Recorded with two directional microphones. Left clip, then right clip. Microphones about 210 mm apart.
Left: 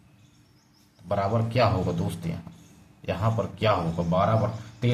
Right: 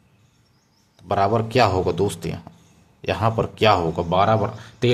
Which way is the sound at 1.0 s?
55° right (ahead or behind).